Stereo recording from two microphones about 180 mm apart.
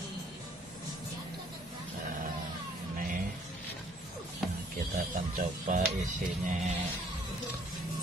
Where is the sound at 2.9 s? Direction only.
50° right (ahead or behind).